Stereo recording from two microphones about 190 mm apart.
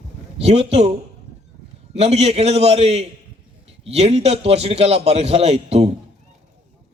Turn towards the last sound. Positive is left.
turn(degrees=-35)  # may be behind; listen again after turning